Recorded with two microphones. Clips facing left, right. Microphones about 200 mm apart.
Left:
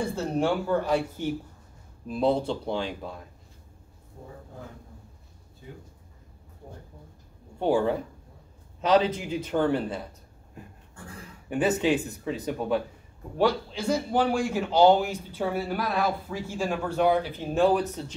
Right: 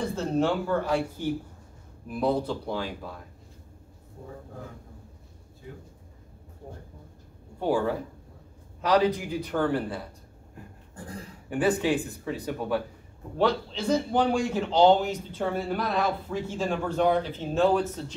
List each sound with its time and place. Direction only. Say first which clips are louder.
0.1 s a man's voice: even; 15° left (ahead or behind)
7.6 s speech: left 2 dB; 20° left (ahead or behind)
11.4 s speech: even; 20° left (ahead or behind)
13.4 s a man's voice: left 1 dB; 10° left (ahead or behind)